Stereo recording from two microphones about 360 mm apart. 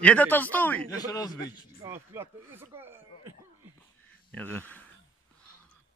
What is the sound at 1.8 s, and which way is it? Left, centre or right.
Speech, centre.